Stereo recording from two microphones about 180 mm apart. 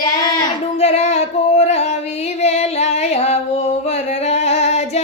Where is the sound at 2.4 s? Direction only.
35° left (ahead or behind).